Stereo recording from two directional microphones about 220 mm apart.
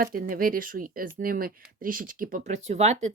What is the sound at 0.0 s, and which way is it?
A woman's voice, 40° right (ahead or behind).